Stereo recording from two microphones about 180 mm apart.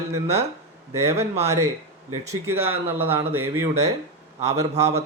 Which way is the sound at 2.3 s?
15° right (ahead or behind).